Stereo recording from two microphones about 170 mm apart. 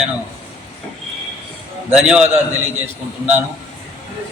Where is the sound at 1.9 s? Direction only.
5° right (ahead or behind).